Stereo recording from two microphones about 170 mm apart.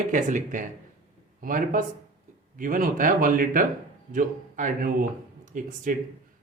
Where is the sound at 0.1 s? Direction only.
50° right (ahead or behind).